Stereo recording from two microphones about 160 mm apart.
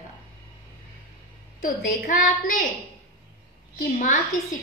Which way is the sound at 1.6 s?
55° left (ahead or behind).